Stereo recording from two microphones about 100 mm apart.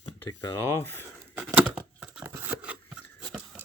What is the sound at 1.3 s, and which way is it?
Tearing, 10° right (ahead or behind).